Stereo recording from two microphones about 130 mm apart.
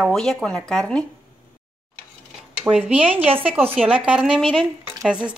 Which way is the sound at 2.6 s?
10° right (ahead or behind).